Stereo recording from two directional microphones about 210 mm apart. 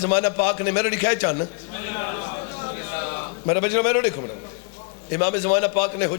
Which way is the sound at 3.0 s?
15° left (ahead or behind).